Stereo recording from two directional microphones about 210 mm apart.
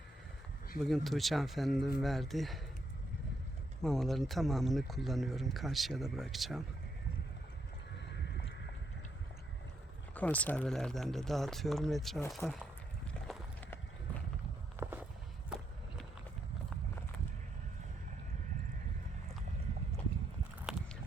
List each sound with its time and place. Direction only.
0.8 s speech: centre (ahead or behind)
3.8 s speech: centre (ahead or behind)
8.0 s a sound: 55° left (ahead or behind)
10.2 s speech: 5° left (ahead or behind)
13.2 s clip-clop: 5° left (ahead or behind)
14.8 s walk: 10° right (ahead or behind)
20.7 s a sound: 5° right (ahead or behind)